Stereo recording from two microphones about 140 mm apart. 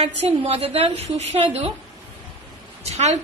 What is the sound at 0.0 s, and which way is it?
A woman's voice, 45° right (ahead or behind).